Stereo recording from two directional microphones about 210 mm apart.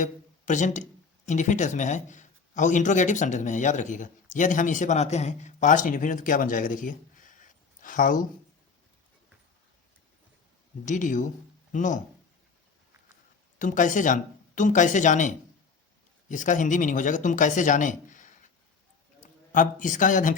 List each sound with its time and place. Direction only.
0.0 s speech: 35° left (ahead or behind)
10.8 s speech: 35° left (ahead or behind)
13.6 s speech: 40° left (ahead or behind)
19.5 s speech: 40° left (ahead or behind)